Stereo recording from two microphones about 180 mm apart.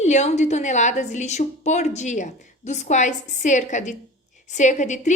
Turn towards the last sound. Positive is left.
turn(degrees=40)  # may be behind; listen again after turning